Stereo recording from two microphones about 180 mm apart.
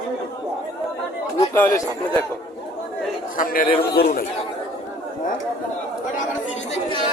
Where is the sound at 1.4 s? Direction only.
15° left (ahead or behind).